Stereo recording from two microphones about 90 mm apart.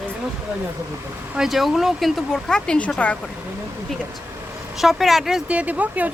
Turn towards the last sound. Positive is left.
turn(degrees=-15)  # may be behind; listen again after turning